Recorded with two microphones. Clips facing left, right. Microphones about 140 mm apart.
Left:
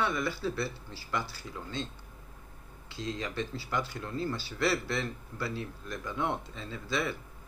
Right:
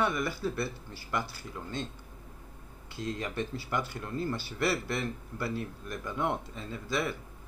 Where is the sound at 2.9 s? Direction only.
50° right (ahead or behind).